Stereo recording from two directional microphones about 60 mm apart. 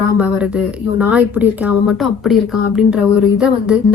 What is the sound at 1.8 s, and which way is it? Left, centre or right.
Speech, centre.